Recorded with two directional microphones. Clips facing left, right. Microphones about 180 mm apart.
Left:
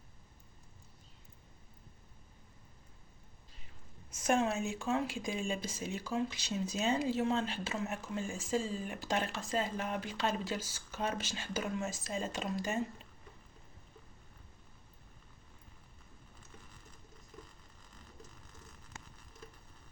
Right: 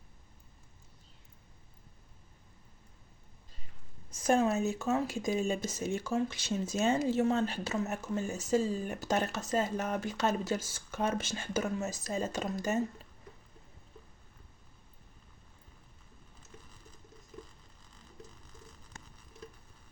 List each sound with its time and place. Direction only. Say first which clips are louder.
4.1 s speech: right 4 dB; 35° right (ahead or behind)